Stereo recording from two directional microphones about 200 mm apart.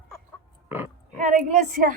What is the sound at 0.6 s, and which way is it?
Speech, 10° right (ahead or behind).